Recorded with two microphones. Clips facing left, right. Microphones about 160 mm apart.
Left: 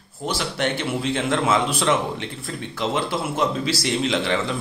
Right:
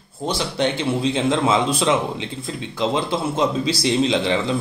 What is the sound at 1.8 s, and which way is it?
Speech, 10° right (ahead or behind).